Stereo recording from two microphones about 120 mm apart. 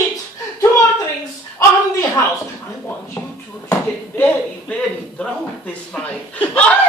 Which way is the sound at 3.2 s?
20° left (ahead or behind).